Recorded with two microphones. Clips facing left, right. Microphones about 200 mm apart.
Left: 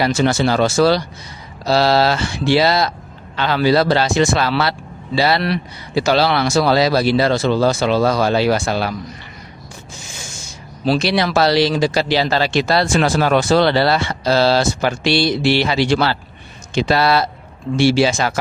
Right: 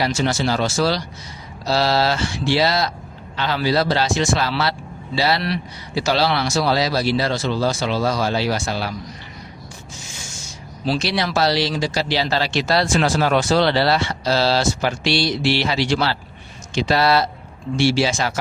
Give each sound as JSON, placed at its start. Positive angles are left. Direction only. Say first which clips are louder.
{"t": 0.0, "sound": "speech", "louder": "left 5 dB", "side_deg": 55}
{"t": 10.8, "sound": "speech", "louder": "left 5 dB", "side_deg": 55}